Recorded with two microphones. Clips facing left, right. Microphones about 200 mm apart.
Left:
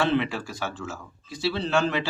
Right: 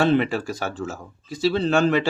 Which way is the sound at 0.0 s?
45° right (ahead or behind).